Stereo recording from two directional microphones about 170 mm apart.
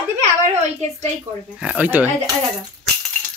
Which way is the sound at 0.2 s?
45° right (ahead or behind).